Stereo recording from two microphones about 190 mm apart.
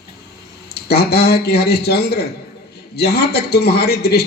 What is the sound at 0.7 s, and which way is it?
A man's voice, 55° left (ahead or behind).